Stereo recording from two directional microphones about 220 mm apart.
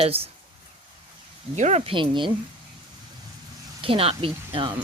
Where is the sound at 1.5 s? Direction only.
30° right (ahead or behind).